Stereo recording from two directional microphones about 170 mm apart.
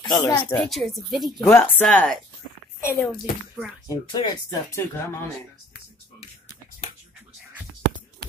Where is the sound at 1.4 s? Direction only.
10° left (ahead or behind).